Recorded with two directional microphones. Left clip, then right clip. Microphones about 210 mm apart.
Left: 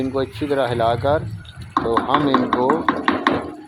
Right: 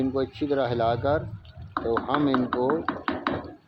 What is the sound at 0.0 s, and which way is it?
Speech, 15° left (ahead or behind).